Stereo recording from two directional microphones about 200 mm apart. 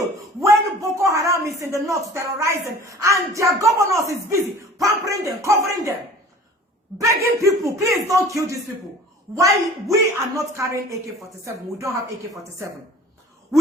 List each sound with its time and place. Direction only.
0.3 s a man's voice: 15° right (ahead or behind)
7.0 s a man's voice: 15° right (ahead or behind)